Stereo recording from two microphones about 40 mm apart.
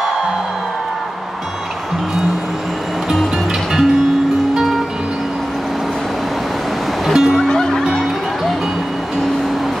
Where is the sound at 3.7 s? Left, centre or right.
Centre.